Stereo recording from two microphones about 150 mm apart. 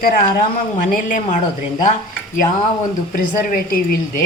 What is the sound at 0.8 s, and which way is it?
Speech, 60° left (ahead or behind).